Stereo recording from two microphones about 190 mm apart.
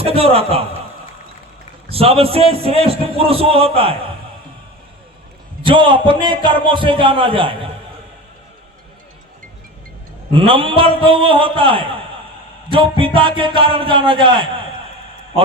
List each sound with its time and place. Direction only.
0.0 s a man's voice: 30° right (ahead or behind)
1.9 s a man's voice: 30° right (ahead or behind)
5.6 s a man's voice: 25° right (ahead or behind)
10.3 s a man's voice: 25° right (ahead or behind)